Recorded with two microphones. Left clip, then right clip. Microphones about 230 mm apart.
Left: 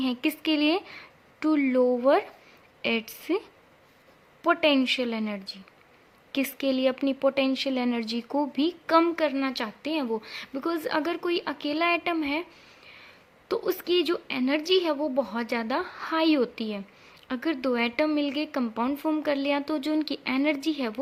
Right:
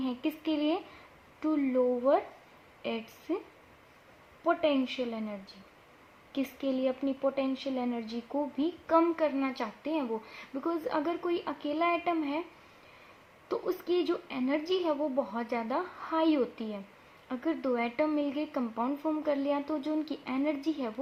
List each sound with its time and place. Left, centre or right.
0.0 s speech: left
4.4 s speech: left
13.5 s speech: left